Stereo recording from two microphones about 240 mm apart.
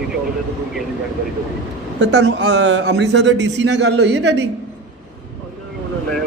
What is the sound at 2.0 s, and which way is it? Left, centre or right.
A man's voice, right.